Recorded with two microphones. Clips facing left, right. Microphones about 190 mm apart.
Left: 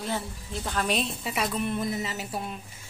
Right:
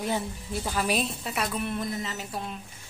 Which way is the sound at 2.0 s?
10° left (ahead or behind).